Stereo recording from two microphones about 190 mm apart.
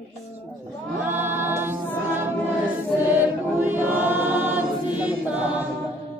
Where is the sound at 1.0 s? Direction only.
10° right (ahead or behind).